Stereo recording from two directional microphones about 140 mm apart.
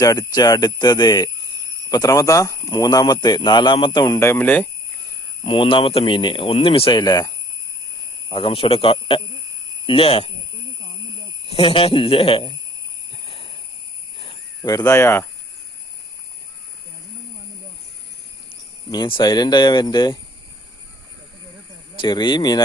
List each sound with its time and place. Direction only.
0.0 s speech: 25° left (ahead or behind)
4.2 s speech: 15° left (ahead or behind)
5.4 s speech: 40° left (ahead or behind)
7.0 s speech: 25° left (ahead or behind)
8.3 s speech: 40° left (ahead or behind)
11.4 s speech: 40° left (ahead or behind)
13.1 s a sound: 40° left (ahead or behind)
14.2 s cricket: 35° left (ahead or behind)
18.4 s speech: 35° left (ahead or behind)
21.9 s speech: 30° left (ahead or behind)